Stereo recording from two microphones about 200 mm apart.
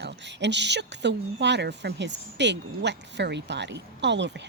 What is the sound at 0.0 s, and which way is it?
Speech, 60° right (ahead or behind).